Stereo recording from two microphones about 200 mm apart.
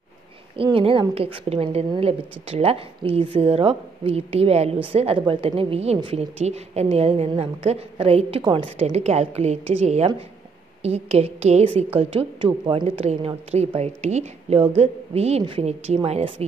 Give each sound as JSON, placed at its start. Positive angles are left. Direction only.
{"t": 0.6, "sound": "a woman's voice", "side_deg": -30}